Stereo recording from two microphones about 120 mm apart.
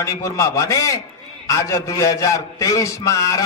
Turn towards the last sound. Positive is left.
turn(degrees=25)  # may be behind; listen again after turning